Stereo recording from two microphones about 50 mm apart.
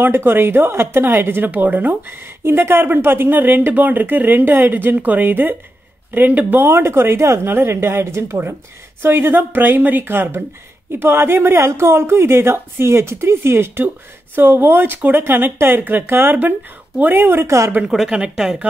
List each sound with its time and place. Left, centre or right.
0.0 s speech: right
1.5 s speech: right
6.7 s speech: right
7.4 s speech: right
7.7 s speech: right
11.5 s speech: right
15.2 s speech: right
17.5 s a woman's voice: right
18.3 s speech: centre